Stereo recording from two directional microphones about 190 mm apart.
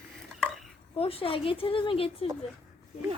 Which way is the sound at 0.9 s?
30° left (ahead or behind).